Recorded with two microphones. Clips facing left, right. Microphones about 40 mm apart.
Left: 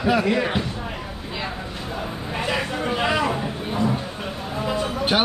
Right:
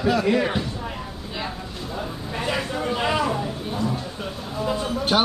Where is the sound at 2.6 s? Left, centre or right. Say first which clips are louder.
Left 1 dB; left.